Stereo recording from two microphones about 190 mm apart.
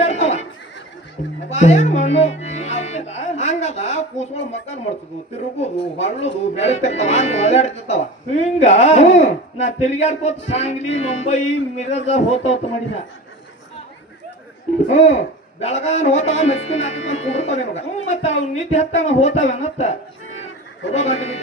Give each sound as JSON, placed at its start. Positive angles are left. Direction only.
{"t": 0.0, "sound": "a sound", "side_deg": 35}
{"t": 1.5, "sound": "speech", "side_deg": 35}
{"t": 14.8, "sound": "speech", "side_deg": 35}